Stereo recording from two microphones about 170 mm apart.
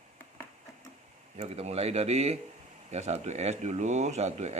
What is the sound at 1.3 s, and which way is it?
Speech, 40° right (ahead or behind).